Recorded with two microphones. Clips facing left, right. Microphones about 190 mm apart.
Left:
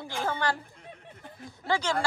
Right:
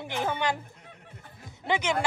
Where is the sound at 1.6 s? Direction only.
20° right (ahead or behind).